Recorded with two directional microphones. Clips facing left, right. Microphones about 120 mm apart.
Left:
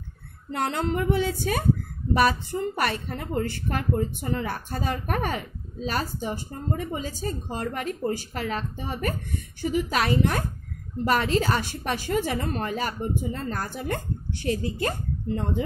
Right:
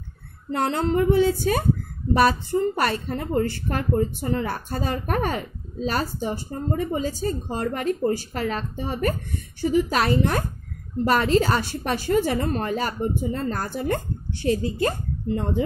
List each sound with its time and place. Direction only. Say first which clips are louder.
0.5 s a woman's voice: right 4 dB; 30° right (ahead or behind)